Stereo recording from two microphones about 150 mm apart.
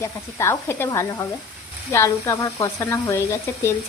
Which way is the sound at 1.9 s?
15° left (ahead or behind).